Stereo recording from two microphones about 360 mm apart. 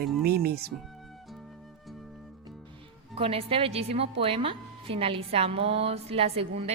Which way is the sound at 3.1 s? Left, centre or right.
Centre.